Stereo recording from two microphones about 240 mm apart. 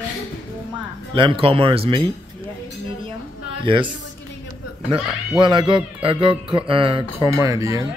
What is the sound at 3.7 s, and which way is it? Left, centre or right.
Speech, right.